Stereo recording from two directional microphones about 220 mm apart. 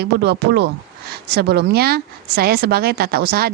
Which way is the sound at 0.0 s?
50° right (ahead or behind).